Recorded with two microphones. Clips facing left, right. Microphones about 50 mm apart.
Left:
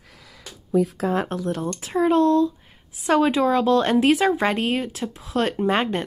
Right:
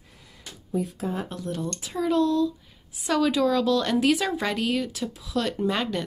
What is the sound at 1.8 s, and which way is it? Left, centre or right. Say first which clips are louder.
Speech: left 5 dB; left.